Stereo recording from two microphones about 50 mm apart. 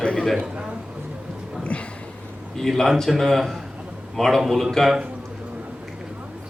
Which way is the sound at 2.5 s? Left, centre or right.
Centre.